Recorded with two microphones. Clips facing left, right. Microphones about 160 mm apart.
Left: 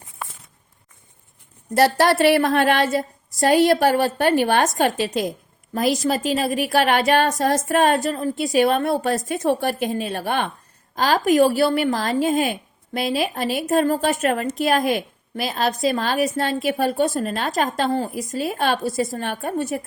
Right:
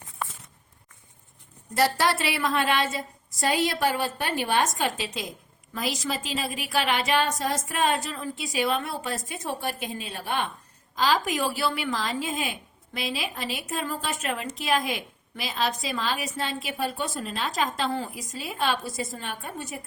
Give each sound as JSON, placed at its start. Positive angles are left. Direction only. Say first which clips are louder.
{"t": 1.7, "sound": "a woman's voice", "louder": "left 7 dB", "side_deg": 65}
{"t": 9.0, "sound": "a woman's voice", "louder": "left 10 dB", "side_deg": 65}
{"t": 10.9, "sound": "a woman's voice", "louder": "left 8 dB", "side_deg": 55}
{"t": 18.1, "sound": "a woman's voice", "louder": "left 11 dB", "side_deg": 60}